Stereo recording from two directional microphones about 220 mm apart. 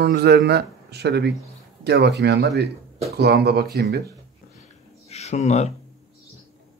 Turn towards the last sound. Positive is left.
turn(degrees=30)  # may be behind; listen again after turning